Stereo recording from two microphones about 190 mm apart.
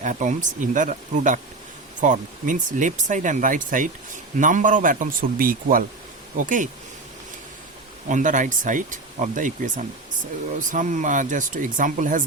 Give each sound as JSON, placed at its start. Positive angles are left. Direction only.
{"t": 0.0, "sound": "speech", "side_deg": -40}
{"t": 8.1, "sound": "speech", "side_deg": -40}